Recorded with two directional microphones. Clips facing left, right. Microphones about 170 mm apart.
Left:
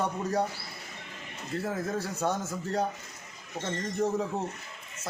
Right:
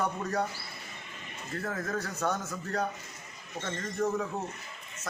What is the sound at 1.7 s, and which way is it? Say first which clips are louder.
A man's voice: left 1 dB; 25° left (ahead or behind).